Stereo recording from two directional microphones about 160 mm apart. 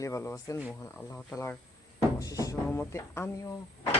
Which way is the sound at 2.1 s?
20° left (ahead or behind).